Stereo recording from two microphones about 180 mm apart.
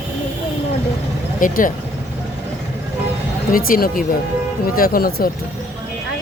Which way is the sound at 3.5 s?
50° left (ahead or behind).